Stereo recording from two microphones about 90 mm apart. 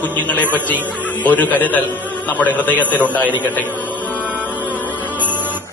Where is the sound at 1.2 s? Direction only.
20° left (ahead or behind).